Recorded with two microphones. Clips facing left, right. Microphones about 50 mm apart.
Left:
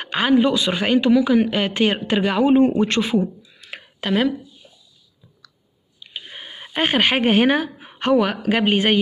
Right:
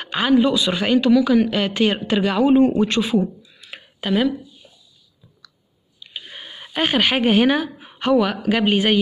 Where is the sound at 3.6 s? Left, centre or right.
Left.